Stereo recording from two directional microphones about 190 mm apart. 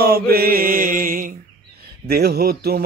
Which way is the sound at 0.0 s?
55° right (ahead or behind).